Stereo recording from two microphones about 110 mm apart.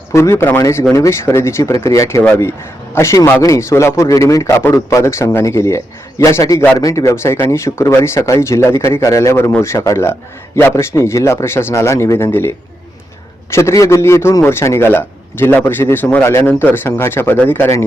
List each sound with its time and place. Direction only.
0.1 s a man's voice: 25° left (ahead or behind)